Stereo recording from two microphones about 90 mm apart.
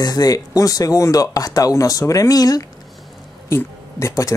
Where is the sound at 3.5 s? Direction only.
30° left (ahead or behind).